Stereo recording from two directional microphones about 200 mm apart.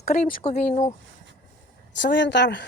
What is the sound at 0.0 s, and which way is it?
Speech, 40° left (ahead or behind).